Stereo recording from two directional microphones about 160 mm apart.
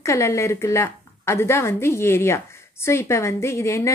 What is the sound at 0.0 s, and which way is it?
A woman's voice, 20° left (ahead or behind).